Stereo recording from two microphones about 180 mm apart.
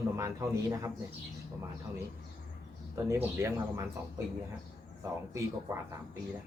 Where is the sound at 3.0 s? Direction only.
15° right (ahead or behind).